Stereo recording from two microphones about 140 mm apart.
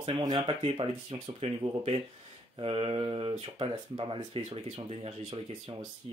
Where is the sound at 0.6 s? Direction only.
40° right (ahead or behind).